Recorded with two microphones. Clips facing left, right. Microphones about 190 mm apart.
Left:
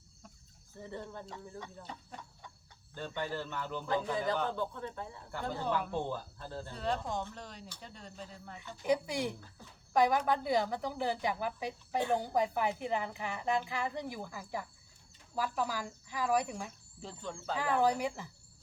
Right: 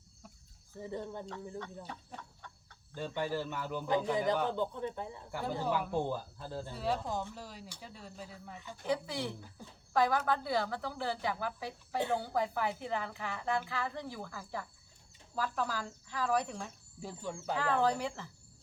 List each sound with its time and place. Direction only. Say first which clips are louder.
0.8 s speech: right 3 dB; 15° right (ahead or behind)
1.8 s speech: right 1 dB; 5° right (ahead or behind)
8.8 s a woman's voice: left 3 dB; 15° left (ahead or behind)
17.0 s speech: right 2 dB; 10° right (ahead or behind)
17.6 s a woman's voice: left 1 dB; 15° left (ahead or behind)